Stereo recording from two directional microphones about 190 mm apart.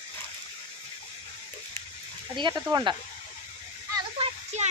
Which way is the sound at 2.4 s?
25° right (ahead or behind).